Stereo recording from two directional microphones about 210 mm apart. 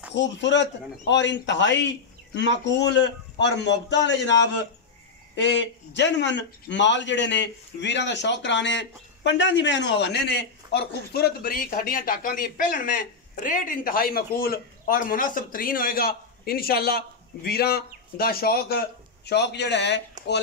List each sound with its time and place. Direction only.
0.1 s a man's voice: 60° left (ahead or behind)